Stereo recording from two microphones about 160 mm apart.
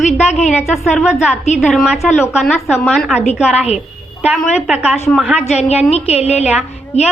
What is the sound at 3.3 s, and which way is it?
A woman's voice, 5° right (ahead or behind).